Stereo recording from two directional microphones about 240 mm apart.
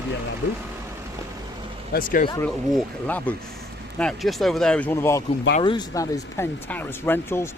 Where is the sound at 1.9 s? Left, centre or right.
Left.